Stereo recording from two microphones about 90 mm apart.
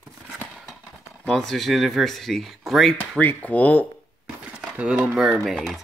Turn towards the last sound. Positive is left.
turn(degrees=-5)  # may be behind; listen again after turning